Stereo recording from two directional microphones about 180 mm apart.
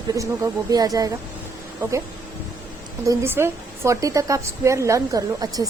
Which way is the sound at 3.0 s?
15° right (ahead or behind).